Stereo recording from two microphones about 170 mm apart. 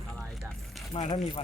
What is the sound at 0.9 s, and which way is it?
Speech, 35° left (ahead or behind).